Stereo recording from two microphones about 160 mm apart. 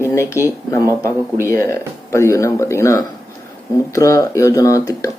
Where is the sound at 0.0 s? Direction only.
15° left (ahead or behind).